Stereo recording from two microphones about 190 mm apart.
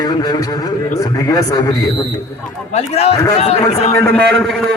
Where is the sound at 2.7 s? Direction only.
35° left (ahead or behind).